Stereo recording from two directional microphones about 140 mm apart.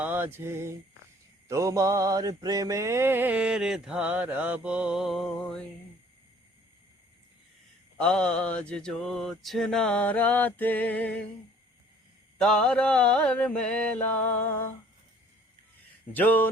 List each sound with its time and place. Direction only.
0.0 s mantra: 15° right (ahead or behind); by 5.6 s 5° left (ahead or behind)
7.9 s mantra: 5° left (ahead or behind)
12.4 s mantra: 5° left (ahead or behind)
16.1 s mantra: 10° left (ahead or behind)